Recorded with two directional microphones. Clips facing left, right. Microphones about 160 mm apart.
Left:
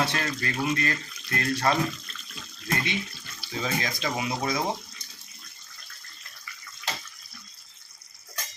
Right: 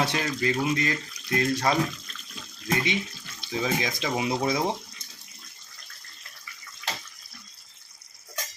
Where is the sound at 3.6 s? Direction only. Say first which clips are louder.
Right 2 dB; 15° right (ahead or behind).